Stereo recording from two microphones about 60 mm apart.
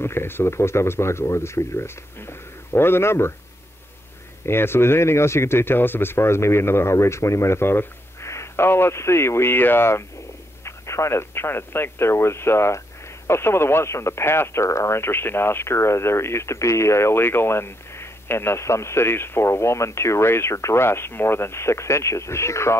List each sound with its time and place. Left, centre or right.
0.0 s speech: left
4.5 s speech: left